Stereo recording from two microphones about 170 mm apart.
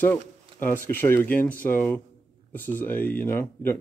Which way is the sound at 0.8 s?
10° left (ahead or behind).